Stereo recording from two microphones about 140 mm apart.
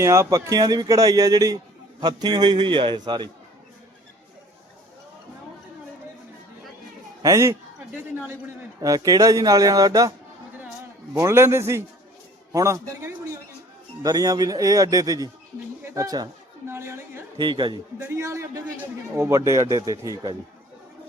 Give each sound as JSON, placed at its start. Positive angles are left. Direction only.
{"t": 0.0, "sound": "a man's voice", "side_deg": -20}
{"t": 7.2, "sound": "speech", "side_deg": -25}
{"t": 8.8, "sound": "speech", "side_deg": -25}
{"t": 17.4, "sound": "a man's voice", "side_deg": -35}
{"t": 18.0, "sound": "speech", "side_deg": -20}